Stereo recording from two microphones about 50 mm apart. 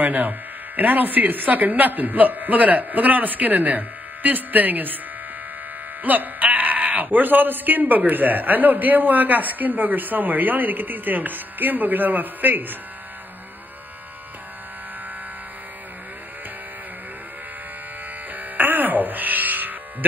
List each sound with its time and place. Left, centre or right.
0.0 s speech: right
6.0 s speech: right
18.3 s electric shaver: right